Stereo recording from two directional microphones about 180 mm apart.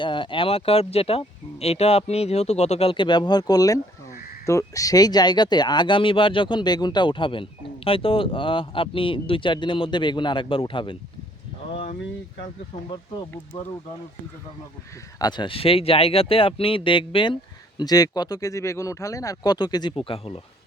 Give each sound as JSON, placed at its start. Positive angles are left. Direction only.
{"t": 0.0, "sound": "speech", "side_deg": 25}
{"t": 13.5, "sound": "speech", "side_deg": 35}
{"t": 15.2, "sound": "speech", "side_deg": 25}